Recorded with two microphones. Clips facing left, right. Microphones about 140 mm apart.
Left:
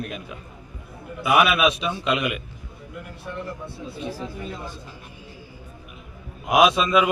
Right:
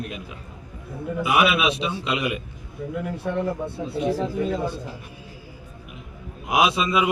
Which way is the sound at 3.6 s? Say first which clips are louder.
Right 8 dB; 70° right (ahead or behind).